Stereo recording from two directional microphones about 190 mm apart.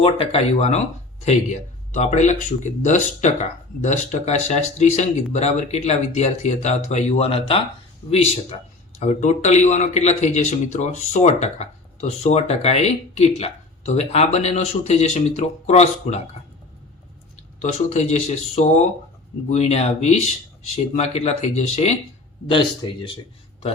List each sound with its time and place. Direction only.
0.0 s a man's voice: 30° left (ahead or behind)
17.6 s a man's voice: 35° left (ahead or behind)